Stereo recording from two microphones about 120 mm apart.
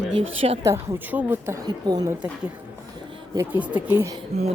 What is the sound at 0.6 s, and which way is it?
A woman's voice, 25° right (ahead or behind).